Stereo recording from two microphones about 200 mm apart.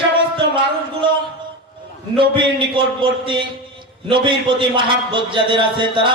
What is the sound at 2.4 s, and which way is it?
A man's voice, 25° right (ahead or behind).